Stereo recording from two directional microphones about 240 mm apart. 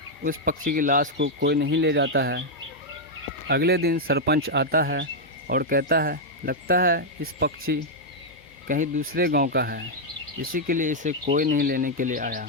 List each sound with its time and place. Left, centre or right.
0.3 s speech: right
3.4 s speech: right
8.6 s speech: right